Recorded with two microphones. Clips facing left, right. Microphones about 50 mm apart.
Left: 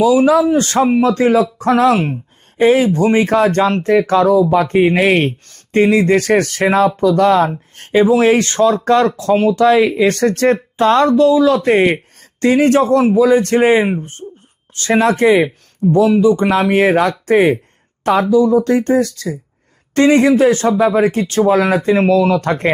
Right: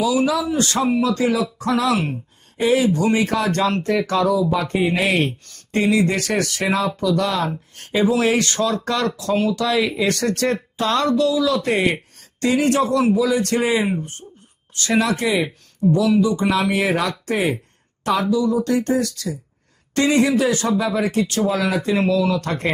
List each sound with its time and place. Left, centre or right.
0.0 s speech: left